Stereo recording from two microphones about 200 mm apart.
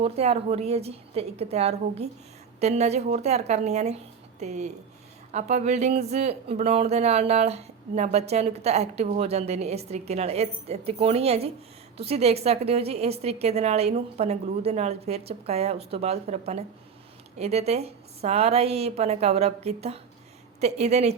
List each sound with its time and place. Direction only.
0.0 s speech: 30° right (ahead or behind)